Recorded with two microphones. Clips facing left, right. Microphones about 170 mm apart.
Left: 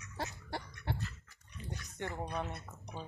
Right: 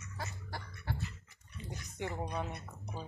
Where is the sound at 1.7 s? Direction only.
15° right (ahead or behind).